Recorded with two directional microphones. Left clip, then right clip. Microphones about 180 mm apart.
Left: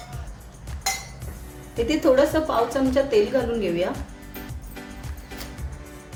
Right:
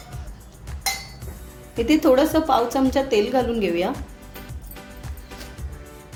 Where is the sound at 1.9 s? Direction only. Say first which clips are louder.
Right 2 dB; 40° right (ahead or behind).